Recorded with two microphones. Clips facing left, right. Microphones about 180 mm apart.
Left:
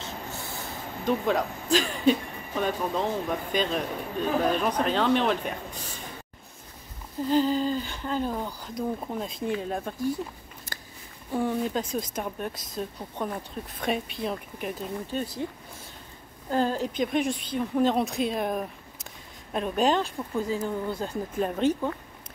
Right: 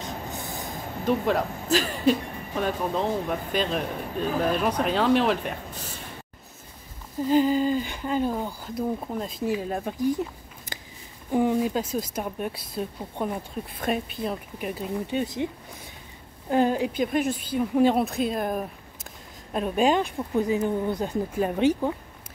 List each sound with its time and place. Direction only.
0.0 s train: 15° right (ahead or behind)
1.0 s speech: 5° right (ahead or behind)
7.2 s speech: 10° right (ahead or behind)
11.3 s speech: 15° right (ahead or behind)
15.1 s speech: 20° right (ahead or behind)
16.4 s speech: 15° right (ahead or behind)